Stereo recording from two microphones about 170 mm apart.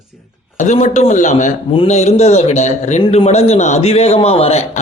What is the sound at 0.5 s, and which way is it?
A man's voice, 45° left (ahead or behind).